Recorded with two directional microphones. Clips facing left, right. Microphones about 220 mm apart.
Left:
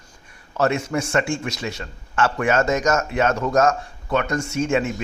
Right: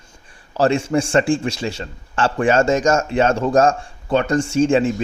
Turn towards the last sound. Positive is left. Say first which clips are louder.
# right 6 dB
turn(degrees=-30)  # may be behind; listen again after turning